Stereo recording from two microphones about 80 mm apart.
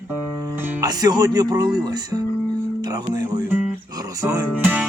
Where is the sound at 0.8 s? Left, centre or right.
Right.